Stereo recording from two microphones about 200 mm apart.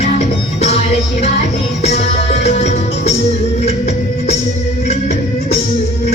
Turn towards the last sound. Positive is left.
turn(degrees=35)  # may be behind; listen again after turning